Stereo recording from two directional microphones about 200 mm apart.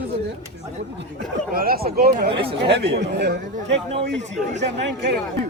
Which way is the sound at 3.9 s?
35° right (ahead or behind).